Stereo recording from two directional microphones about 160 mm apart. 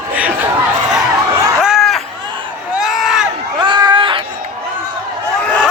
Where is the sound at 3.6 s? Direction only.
25° right (ahead or behind).